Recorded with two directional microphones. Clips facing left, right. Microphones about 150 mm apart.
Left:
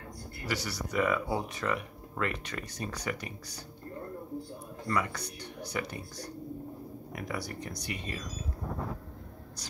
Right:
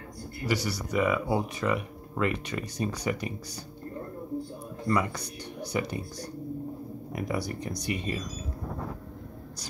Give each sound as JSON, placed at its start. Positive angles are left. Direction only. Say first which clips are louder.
{"t": 0.5, "sound": "speech", "louder": "right 5 dB", "side_deg": -10}
{"t": 4.8, "sound": "speech", "louder": "right 4 dB", "side_deg": -20}
{"t": 7.1, "sound": "speech", "louder": "right 6 dB", "side_deg": -20}